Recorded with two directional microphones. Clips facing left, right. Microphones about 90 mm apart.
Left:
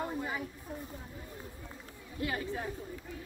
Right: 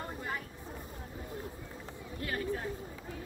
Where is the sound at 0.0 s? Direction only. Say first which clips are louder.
Left 3 dB; 10° left (ahead or behind).